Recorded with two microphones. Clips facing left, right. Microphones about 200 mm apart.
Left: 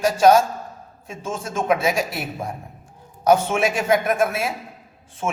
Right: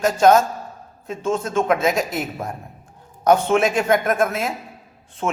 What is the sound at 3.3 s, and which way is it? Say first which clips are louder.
Speech: right 2 dB; 10° left (ahead or behind).